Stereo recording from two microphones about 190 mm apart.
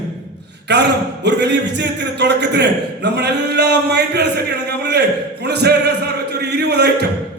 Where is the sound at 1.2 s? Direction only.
65° right (ahead or behind).